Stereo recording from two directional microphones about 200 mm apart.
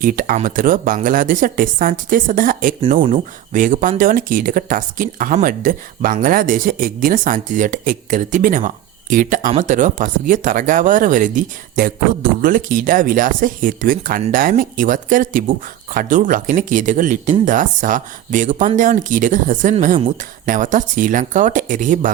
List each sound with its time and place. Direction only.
0.0 s speech: 45° right (ahead or behind)